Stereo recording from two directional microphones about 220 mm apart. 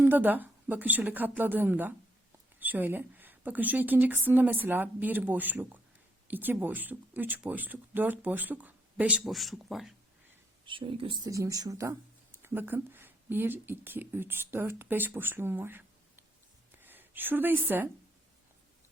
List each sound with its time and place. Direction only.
0.0 s speech: 10° right (ahead or behind)
10.7 s speech: 25° right (ahead or behind)